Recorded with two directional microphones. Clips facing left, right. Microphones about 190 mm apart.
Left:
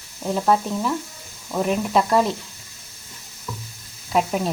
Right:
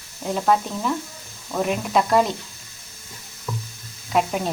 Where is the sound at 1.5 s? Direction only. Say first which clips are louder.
Left 1 dB; centre (ahead or behind).